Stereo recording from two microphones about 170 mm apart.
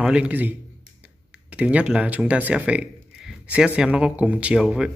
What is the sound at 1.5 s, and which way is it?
Speech, 5° right (ahead or behind).